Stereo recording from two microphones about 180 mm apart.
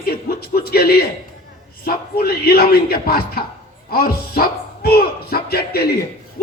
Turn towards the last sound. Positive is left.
turn(degrees=55)  # may be behind; listen again after turning